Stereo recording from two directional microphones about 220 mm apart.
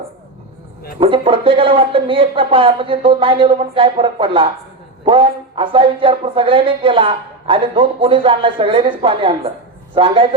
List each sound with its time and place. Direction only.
0.9 s speech: 25° right (ahead or behind)